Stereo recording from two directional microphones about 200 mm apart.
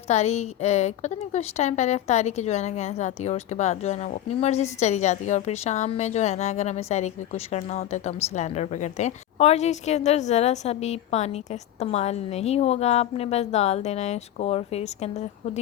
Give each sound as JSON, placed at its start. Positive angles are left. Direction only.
{"t": 0.1, "sound": "a woman's voice", "side_deg": 35}